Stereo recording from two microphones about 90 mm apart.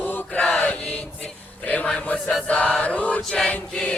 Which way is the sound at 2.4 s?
15° left (ahead or behind).